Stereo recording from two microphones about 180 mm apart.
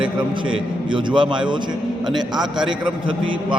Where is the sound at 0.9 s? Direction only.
25° right (ahead or behind).